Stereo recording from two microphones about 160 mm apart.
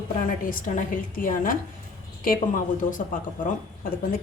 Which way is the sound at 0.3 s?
60° left (ahead or behind).